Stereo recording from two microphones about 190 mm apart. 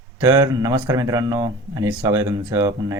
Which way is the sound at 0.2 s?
20° right (ahead or behind).